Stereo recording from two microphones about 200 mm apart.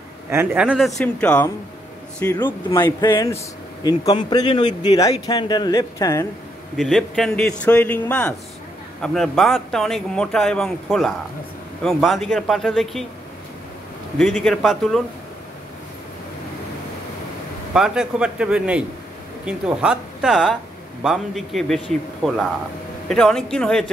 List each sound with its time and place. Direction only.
0.3 s speech: 10° right (ahead or behind); by 1.5 s 5° left (ahead or behind)
2.2 s speech: 20° left (ahead or behind)
6.8 s speech: centre (ahead or behind)
14.4 s speech: centre (ahead or behind)
17.7 s speech: 5° right (ahead or behind)